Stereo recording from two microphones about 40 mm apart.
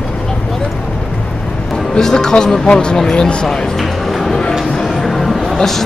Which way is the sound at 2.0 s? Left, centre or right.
Centre.